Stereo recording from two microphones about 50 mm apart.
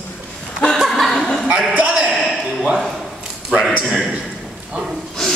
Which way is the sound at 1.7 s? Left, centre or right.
Right.